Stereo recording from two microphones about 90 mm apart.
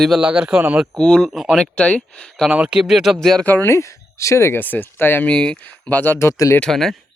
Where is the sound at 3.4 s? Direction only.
20° left (ahead or behind).